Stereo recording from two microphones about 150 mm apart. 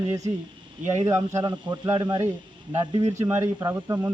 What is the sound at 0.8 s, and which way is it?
Speech, 20° right (ahead or behind).